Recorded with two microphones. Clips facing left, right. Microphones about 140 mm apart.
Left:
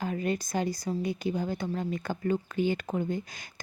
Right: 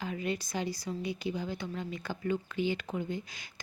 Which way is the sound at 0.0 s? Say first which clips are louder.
Left 4 dB; 45° left (ahead or behind).